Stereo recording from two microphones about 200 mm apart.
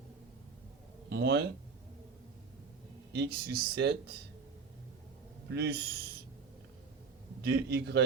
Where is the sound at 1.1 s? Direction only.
55° right (ahead or behind).